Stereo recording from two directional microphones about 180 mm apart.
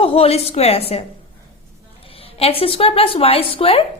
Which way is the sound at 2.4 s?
30° left (ahead or behind).